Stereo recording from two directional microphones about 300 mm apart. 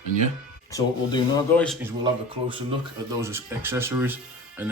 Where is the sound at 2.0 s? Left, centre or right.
Centre.